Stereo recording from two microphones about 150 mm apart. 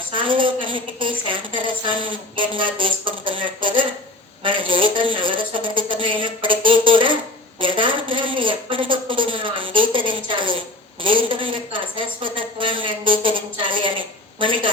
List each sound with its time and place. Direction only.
0.1 s a woman's voice: 35° right (ahead or behind)